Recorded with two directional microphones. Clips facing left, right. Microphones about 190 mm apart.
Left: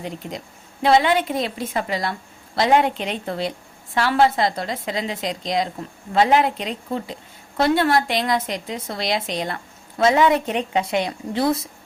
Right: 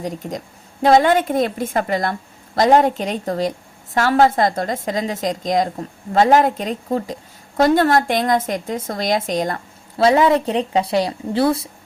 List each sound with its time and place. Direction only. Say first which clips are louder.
0.0 s a woman's voice: right 4 dB; 45° right (ahead or behind)
10.0 s a woman's voice: right 3 dB; 30° right (ahead or behind)